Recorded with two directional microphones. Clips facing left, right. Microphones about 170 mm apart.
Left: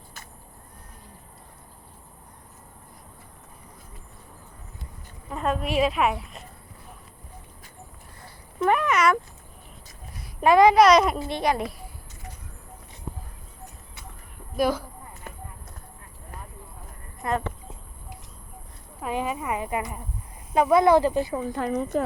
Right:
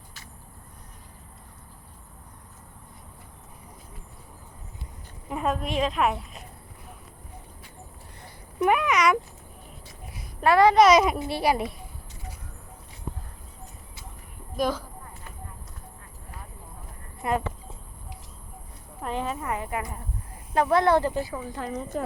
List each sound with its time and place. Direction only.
5.3 s a woman's voice: 5° right (ahead or behind)
8.2 s a sound: 20° right (ahead or behind)
8.7 s a woman's voice: centre (ahead or behind)
10.4 s speech: 15° left (ahead or behind)
10.8 s a woman's voice: centre (ahead or behind)
14.5 s a woman's voice: 10° left (ahead or behind)
17.2 s a woman's voice: 10° right (ahead or behind)
19.0 s a sound: 10° left (ahead or behind)
20.5 s speech: 10° left (ahead or behind)
21.5 s a woman's voice: 65° left (ahead or behind)